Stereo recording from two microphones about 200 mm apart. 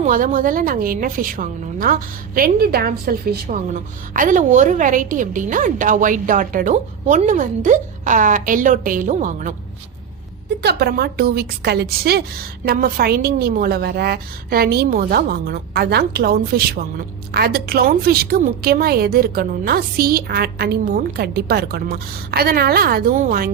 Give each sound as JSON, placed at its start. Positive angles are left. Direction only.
{"t": 0.0, "sound": "a woman's voice", "side_deg": -40}
{"t": 3.5, "sound": "a woman's voice", "side_deg": -40}
{"t": 10.6, "sound": "a woman's voice", "side_deg": -50}